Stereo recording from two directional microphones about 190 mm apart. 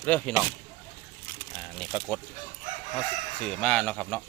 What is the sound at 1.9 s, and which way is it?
Speech, centre (ahead or behind).